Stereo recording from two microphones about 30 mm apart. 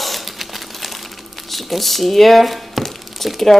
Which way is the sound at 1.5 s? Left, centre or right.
Centre.